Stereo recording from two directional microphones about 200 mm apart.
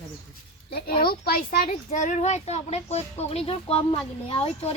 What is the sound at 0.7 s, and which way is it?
A child's voice, 50° left (ahead or behind).